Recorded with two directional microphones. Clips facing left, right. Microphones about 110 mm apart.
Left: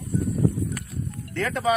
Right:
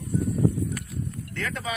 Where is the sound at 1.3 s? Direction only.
20° left (ahead or behind).